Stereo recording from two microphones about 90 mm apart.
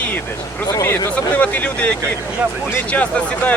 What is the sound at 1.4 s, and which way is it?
Speech, 15° left (ahead or behind).